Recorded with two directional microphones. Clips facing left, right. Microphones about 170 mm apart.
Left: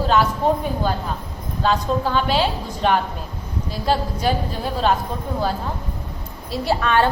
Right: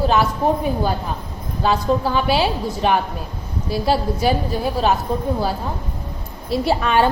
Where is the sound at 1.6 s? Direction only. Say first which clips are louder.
Right 2 dB; 10° right (ahead or behind).